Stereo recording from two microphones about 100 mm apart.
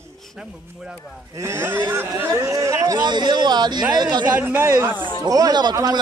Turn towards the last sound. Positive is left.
turn(degrees=-40)  # may be behind; listen again after turning